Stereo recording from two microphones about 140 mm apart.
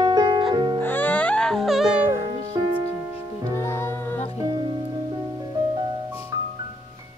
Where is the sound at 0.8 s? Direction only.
15° left (ahead or behind); by 2.1 s 5° right (ahead or behind).